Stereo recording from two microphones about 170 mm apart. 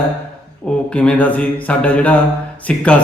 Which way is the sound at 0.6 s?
5° left (ahead or behind).